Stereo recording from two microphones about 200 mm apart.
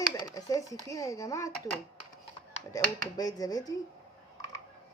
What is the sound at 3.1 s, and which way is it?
Speech, 20° left (ahead or behind).